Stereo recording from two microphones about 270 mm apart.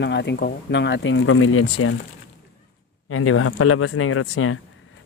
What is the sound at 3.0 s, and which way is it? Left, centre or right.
Speech, left.